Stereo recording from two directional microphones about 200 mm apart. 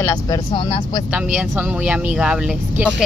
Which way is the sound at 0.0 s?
15° left (ahead or behind).